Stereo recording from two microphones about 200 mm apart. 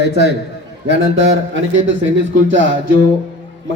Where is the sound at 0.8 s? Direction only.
65° right (ahead or behind).